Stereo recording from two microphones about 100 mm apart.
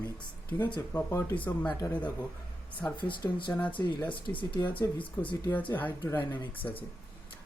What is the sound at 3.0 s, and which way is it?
Speech, 55° left (ahead or behind).